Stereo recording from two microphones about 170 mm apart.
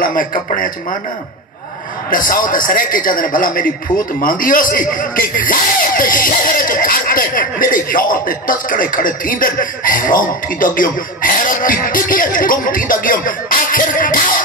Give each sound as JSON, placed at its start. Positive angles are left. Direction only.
{"t": 0.0, "sound": "a man's voice", "side_deg": 50}
{"t": 2.0, "sound": "a man's voice", "side_deg": 55}